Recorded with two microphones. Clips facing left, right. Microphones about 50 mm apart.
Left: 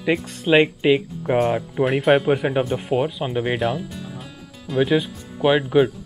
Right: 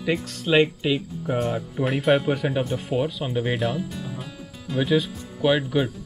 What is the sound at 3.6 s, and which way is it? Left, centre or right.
Music, centre.